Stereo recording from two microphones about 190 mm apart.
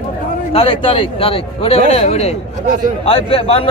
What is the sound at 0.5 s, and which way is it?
A man's voice, 30° left (ahead or behind).